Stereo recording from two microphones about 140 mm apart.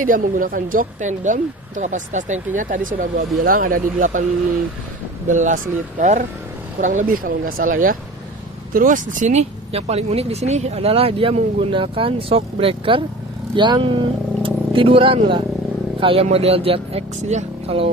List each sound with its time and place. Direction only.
0.0 s speech: 75° right (ahead or behind)
5.3 s speech: 60° right (ahead or behind); by 8.0 s 80° right
8.7 s speech: 65° right (ahead or behind); by 17.8 s 50° right (ahead or behind)